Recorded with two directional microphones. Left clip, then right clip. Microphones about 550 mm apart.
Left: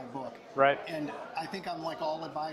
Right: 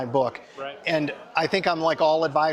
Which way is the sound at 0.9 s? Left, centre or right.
Centre.